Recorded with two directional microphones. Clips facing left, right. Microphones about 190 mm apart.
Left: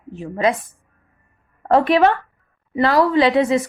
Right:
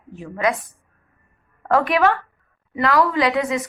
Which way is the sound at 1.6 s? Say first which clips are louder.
Left 3 dB; 30° left (ahead or behind).